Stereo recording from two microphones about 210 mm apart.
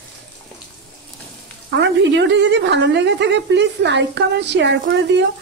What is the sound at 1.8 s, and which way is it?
A woman's voice, 60° right (ahead or behind).